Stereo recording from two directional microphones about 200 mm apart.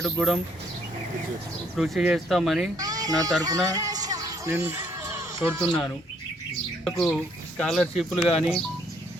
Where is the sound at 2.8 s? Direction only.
20° right (ahead or behind).